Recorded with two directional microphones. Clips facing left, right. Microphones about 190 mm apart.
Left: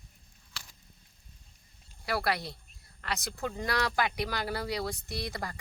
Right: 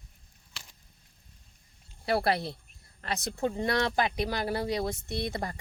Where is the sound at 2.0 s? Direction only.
25° right (ahead or behind).